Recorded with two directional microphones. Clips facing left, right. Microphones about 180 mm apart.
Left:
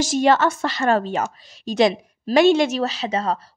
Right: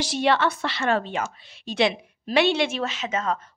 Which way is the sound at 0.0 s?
45° left (ahead or behind).